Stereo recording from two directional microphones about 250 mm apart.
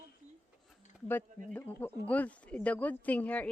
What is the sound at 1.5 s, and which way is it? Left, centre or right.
A woman's voice, centre.